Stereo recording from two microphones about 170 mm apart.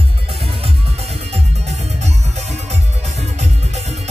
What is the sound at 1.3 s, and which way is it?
Music, 40° right (ahead or behind).